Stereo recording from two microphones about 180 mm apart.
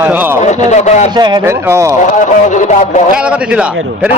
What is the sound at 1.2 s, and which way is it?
Speech, 25° right (ahead or behind).